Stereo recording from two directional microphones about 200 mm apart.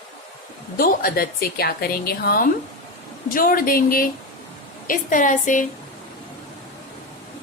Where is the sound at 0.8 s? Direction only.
45° left (ahead or behind).